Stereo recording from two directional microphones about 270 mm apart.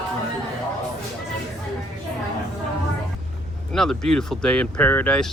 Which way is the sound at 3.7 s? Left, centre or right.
Centre.